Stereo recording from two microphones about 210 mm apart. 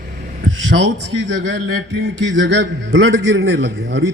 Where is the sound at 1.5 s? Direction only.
60° right (ahead or behind).